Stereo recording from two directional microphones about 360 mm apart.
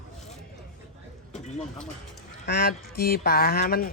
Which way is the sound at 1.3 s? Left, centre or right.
Centre.